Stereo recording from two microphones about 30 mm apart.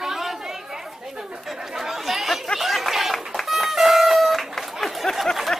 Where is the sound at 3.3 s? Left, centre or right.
Centre.